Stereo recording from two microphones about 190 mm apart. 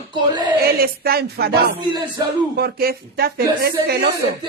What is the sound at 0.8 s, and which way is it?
Speech, 50° right (ahead or behind).